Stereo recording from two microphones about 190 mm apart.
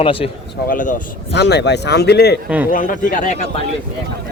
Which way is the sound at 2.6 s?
45° left (ahead or behind).